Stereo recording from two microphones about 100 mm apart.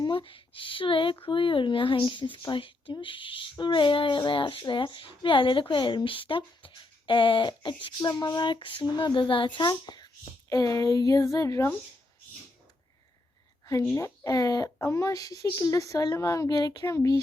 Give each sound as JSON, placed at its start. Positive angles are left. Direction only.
{"t": 0.0, "sound": "speech", "side_deg": 55}
{"t": 10.5, "sound": "speech", "side_deg": 35}
{"t": 13.9, "sound": "speech", "side_deg": 35}
{"t": 16.8, "sound": "speech", "side_deg": 30}